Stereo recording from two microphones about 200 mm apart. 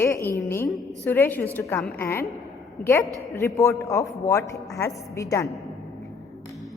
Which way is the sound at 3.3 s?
15° left (ahead or behind).